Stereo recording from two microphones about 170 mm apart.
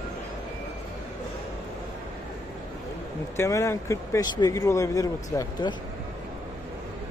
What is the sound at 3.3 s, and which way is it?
Speech, 15° left (ahead or behind).